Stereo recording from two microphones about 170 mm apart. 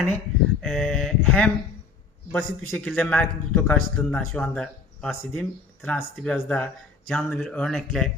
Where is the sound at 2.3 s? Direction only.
5° left (ahead or behind).